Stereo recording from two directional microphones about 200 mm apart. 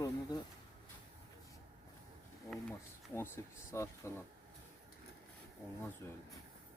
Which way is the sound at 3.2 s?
15° left (ahead or behind).